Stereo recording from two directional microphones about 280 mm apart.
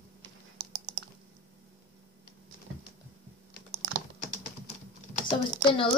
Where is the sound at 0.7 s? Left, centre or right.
Right.